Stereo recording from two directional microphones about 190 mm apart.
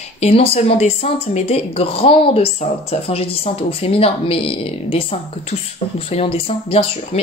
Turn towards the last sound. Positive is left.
turn(degrees=30)  # may be behind; listen again after turning